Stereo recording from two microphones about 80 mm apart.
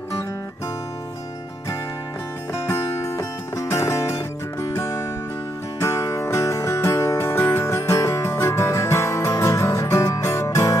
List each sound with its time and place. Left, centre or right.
2.5 s music: left